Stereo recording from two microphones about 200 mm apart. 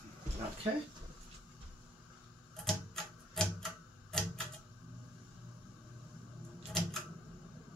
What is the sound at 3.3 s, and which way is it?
Typewriter, centre (ahead or behind).